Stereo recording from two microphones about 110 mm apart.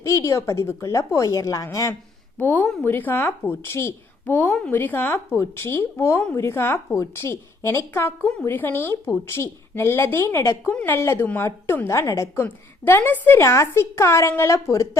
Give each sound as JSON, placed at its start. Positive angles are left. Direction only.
{"t": 0.0, "sound": "a woman's voice", "side_deg": 25}
{"t": 2.4, "sound": "a woman's voice", "side_deg": 15}